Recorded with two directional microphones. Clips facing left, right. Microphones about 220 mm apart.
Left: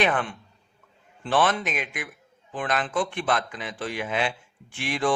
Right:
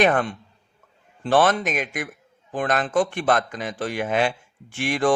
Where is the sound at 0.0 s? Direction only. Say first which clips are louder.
Right 5 dB; 40° right (ahead or behind).